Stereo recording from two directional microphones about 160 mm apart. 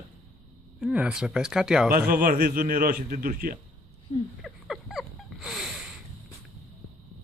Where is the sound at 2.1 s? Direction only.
65° right (ahead or behind).